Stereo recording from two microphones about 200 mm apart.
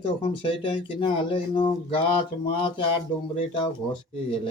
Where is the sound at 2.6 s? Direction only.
25° left (ahead or behind).